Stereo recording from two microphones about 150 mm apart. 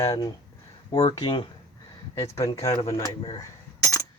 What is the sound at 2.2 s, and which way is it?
Speech, 20° left (ahead or behind).